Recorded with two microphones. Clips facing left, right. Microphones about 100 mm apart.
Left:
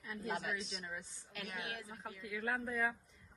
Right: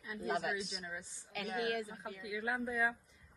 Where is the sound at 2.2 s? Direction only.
10° right (ahead or behind).